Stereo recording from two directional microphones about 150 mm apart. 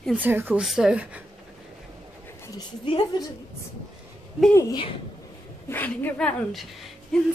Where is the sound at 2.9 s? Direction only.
30° left (ahead or behind).